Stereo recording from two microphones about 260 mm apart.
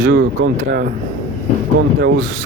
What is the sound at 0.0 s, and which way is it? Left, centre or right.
Speech, right.